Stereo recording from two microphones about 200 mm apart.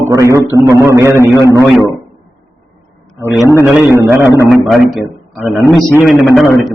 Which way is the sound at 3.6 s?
10° right (ahead or behind).